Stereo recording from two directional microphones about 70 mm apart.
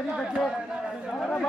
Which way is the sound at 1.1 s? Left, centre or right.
Centre.